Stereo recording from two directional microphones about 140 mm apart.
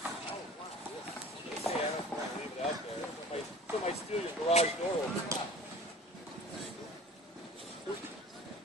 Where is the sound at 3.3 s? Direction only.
50° left (ahead or behind).